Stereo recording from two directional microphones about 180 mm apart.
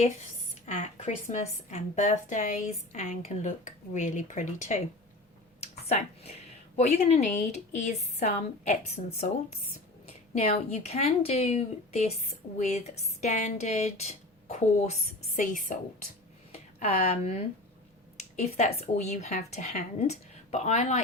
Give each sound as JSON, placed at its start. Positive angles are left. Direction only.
{"t": 0.6, "sound": "a woman's voice", "side_deg": 35}
{"t": 5.5, "sound": "a sound", "side_deg": 35}
{"t": 6.7, "sound": "a woman's voice", "side_deg": 40}
{"t": 10.1, "sound": "a woman's voice", "side_deg": 35}
{"t": 16.5, "sound": "a sound", "side_deg": 35}
{"t": 18.3, "sound": "a woman's voice", "side_deg": 35}